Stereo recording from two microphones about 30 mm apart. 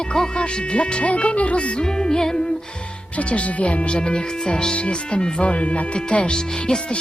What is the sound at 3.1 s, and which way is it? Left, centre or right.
Speech, left.